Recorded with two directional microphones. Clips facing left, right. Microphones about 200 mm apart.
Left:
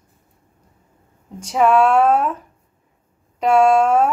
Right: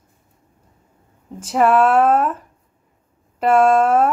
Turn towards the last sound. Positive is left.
turn(degrees=-5)  # may be behind; listen again after turning